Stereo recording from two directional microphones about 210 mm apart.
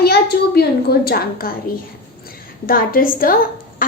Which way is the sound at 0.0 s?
50° left (ahead or behind).